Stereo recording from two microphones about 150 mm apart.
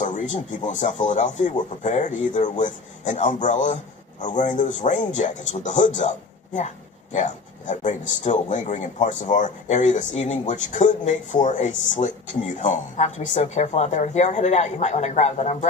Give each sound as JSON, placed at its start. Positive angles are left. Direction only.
{"t": 0.0, "sound": "a man's voice", "side_deg": 55}
{"t": 7.1, "sound": "a man's voice", "side_deg": 55}